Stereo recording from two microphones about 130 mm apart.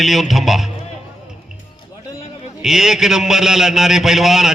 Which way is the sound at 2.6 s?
5° right (ahead or behind).